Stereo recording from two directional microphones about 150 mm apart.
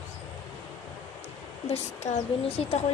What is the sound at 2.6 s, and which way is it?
Speech, 45° left (ahead or behind).